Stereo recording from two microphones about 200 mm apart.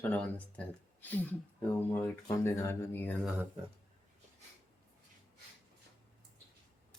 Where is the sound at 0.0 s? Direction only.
10° left (ahead or behind).